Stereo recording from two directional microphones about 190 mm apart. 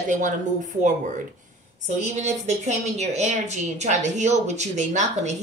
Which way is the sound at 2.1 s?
35° right (ahead or behind).